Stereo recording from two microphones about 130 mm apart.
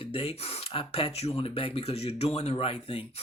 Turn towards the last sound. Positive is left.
turn(degrees=45)  # may be behind; listen again after turning